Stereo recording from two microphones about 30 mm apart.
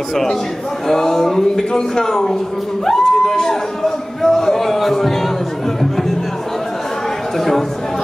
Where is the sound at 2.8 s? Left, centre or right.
Centre.